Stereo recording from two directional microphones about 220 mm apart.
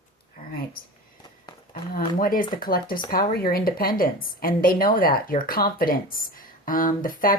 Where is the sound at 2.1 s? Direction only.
40° left (ahead or behind).